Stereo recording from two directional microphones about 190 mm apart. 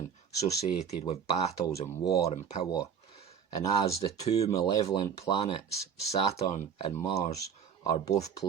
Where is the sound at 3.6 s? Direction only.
20° left (ahead or behind).